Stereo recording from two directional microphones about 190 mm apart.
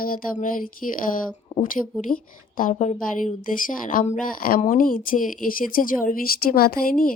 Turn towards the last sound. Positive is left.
turn(degrees=50)  # may be behind; listen again after turning